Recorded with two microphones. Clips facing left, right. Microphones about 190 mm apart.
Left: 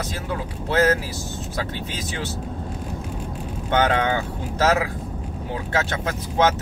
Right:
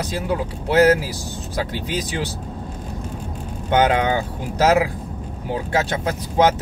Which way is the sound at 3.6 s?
15° right (ahead or behind).